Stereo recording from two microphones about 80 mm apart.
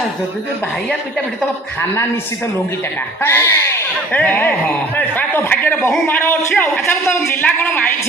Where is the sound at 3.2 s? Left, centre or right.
Left.